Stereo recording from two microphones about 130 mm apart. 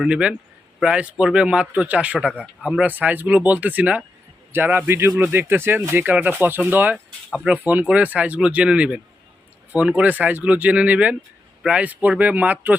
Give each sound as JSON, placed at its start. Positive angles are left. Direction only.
{"t": 0.0, "sound": "speech", "side_deg": -10}